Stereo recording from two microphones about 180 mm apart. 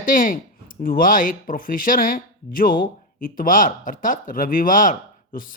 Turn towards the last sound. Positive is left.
turn(degrees=45)  # may be behind; listen again after turning